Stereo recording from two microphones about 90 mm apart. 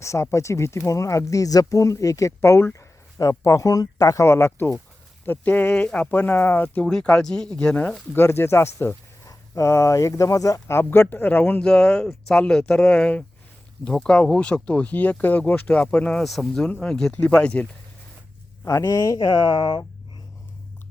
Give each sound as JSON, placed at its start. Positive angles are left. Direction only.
{"t": 0.0, "sound": "speech", "side_deg": 35}
{"t": 3.2, "sound": "speech", "side_deg": 40}
{"t": 6.8, "sound": "speech", "side_deg": 10}
{"t": 8.1, "sound": "speech", "side_deg": 30}
{"t": 10.8, "sound": "speech", "side_deg": 25}
{"t": 16.2, "sound": "speech", "side_deg": 0}
{"t": 18.6, "sound": "speech", "side_deg": 35}
{"t": 19.5, "sound": "speech", "side_deg": 65}